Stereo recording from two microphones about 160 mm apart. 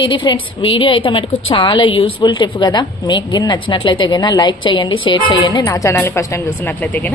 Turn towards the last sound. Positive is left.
turn(degrees=10)  # may be behind; listen again after turning